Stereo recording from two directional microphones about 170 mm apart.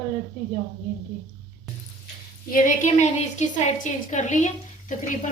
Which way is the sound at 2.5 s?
45° left (ahead or behind).